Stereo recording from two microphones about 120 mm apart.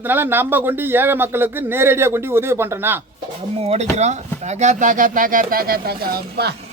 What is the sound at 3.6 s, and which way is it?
Speech, 55° right (ahead or behind).